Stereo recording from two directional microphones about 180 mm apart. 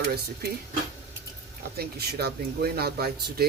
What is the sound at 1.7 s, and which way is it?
Speech, 60° right (ahead or behind).